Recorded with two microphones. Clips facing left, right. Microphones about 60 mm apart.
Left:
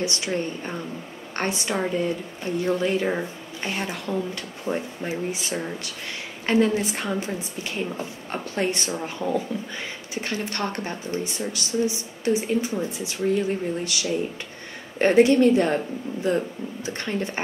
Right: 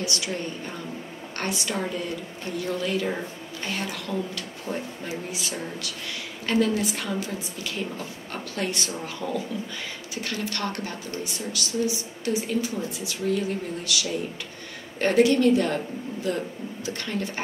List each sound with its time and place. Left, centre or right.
0.0 s a woman's voice: left